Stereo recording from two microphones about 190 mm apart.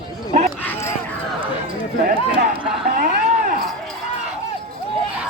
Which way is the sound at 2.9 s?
45° right (ahead or behind).